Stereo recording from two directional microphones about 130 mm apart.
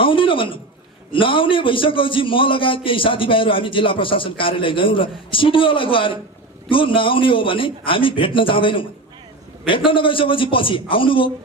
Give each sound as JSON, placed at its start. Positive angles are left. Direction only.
{"t": 0.0, "sound": "a sound", "side_deg": 40}
{"t": 1.1, "sound": "a man's voice", "side_deg": 40}
{"t": 9.8, "sound": "a man's voice", "side_deg": 40}